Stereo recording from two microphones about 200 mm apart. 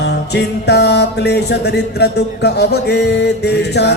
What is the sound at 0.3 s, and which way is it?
Music, 55° left (ahead or behind).